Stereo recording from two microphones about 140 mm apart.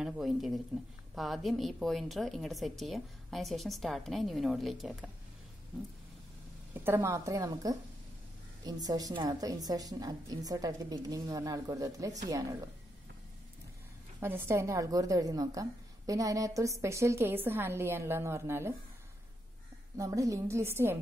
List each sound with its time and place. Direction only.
0.0 s a woman's voice: centre (ahead or behind)
6.7 s a woman's voice: 15° right (ahead or behind)
8.8 s a woman's voice: 30° right (ahead or behind)
14.2 s a woman's voice: 15° right (ahead or behind)
20.0 s a woman's voice: 25° right (ahead or behind)